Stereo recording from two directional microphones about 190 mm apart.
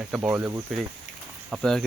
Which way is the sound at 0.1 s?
10° right (ahead or behind).